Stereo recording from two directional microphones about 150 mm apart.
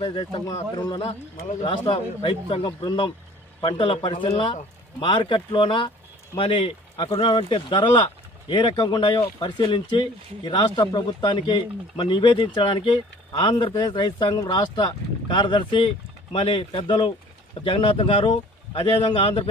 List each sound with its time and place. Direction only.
0.0 s speech: 35° left (ahead or behind)